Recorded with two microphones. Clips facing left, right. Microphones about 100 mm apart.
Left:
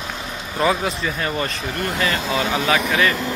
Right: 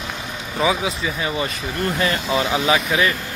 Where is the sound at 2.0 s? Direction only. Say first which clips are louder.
Even; 30° right (ahead or behind).